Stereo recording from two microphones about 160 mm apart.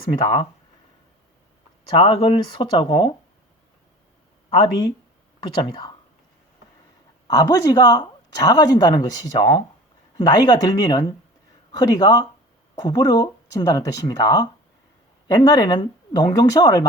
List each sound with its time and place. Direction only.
0.1 s speech: 30° left (ahead or behind)
2.0 s speech: 35° left (ahead or behind)
5.4 s speech: 30° left (ahead or behind)
7.3 s speech: 25° left (ahead or behind)